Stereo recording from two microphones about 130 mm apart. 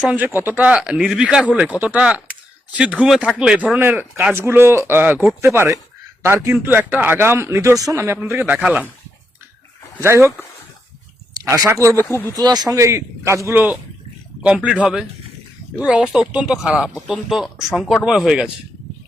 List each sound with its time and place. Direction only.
0.0 s speech: 10° right (ahead or behind)
10.0 s speech: 20° right (ahead or behind)
11.3 s speech: 30° right (ahead or behind)
12.0 s speech: 15° left (ahead or behind)
12.3 s speech: 30° right (ahead or behind); by 14.8 s 5° right (ahead or behind)
15.8 s speech: 10° right (ahead or behind)